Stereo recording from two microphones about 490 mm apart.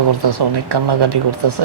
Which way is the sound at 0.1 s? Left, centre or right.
Right.